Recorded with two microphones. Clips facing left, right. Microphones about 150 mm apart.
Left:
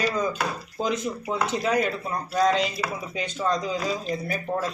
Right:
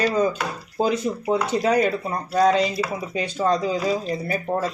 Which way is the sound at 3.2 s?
35° right (ahead or behind).